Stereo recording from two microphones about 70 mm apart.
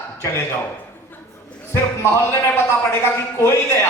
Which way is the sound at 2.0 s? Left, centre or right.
Left.